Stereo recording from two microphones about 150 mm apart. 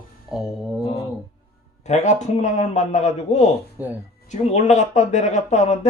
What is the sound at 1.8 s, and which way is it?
Speech, 50° left (ahead or behind).